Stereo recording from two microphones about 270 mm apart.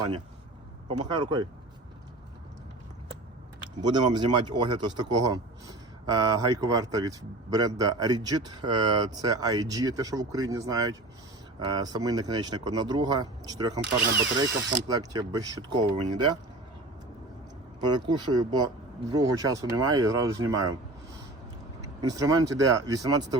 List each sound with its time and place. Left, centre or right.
0.9 s a man's voice: centre
3.8 s a man's voice: centre
17.7 s a man's voice: centre
22.0 s a man's voice: centre